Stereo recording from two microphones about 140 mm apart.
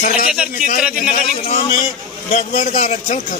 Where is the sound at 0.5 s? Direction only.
75° left (ahead or behind).